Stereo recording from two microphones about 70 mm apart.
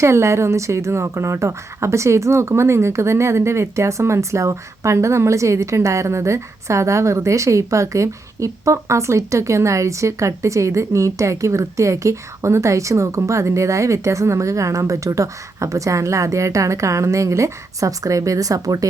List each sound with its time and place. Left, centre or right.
0.0 s a woman's voice: right